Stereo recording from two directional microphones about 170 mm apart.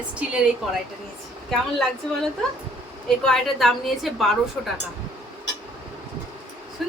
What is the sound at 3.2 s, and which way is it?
A woman's voice, centre (ahead or behind).